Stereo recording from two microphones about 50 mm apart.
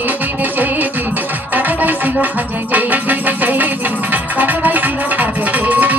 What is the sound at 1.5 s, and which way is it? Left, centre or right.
Music, right.